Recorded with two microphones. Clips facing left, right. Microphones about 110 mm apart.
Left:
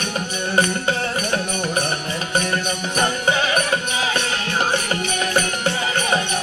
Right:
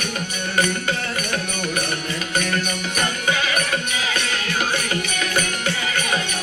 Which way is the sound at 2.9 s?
30° left (ahead or behind).